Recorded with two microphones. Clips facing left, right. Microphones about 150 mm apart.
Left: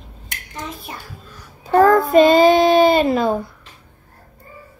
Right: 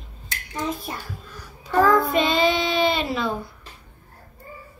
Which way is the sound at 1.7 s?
45° left (ahead or behind).